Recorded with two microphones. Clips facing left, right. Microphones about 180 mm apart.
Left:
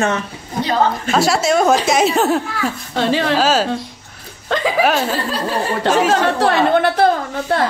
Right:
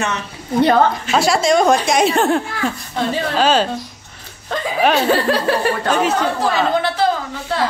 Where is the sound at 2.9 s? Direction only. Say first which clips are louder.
Left 7 dB; 90° left.